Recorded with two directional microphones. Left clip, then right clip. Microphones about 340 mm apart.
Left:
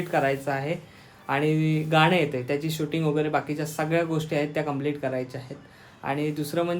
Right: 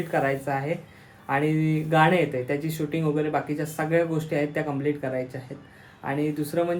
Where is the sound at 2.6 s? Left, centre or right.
Centre.